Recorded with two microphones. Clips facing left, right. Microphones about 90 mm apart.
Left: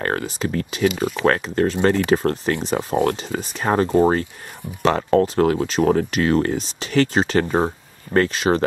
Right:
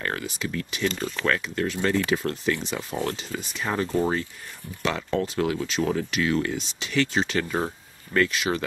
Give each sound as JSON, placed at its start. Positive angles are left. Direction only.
{"t": 0.0, "sound": "speech", "side_deg": 45}
{"t": 0.8, "sound": "speech", "side_deg": 10}
{"t": 1.2, "sound": "speech", "side_deg": 40}
{"t": 3.0, "sound": "speech", "side_deg": 55}